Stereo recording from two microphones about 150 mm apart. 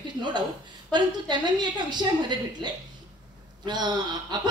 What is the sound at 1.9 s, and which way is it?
Speech, 30° right (ahead or behind).